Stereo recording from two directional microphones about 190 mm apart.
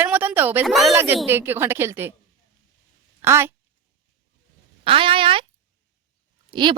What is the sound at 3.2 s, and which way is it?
Speech, 15° right (ahead or behind).